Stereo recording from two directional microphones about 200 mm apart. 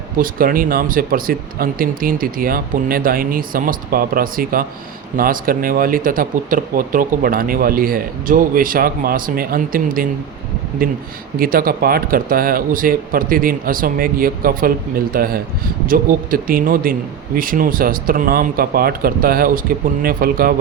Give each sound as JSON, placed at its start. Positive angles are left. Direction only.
{"t": 0.2, "sound": "speech", "side_deg": -45}